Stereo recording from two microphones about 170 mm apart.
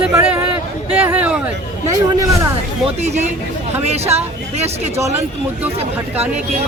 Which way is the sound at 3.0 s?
40° right (ahead or behind).